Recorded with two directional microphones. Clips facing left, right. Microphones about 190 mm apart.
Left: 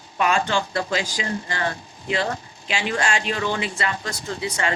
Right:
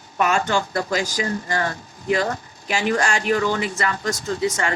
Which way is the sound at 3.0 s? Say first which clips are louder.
Right 2 dB; 40° right (ahead or behind).